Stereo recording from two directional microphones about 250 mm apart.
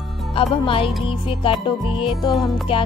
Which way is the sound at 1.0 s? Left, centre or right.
Left.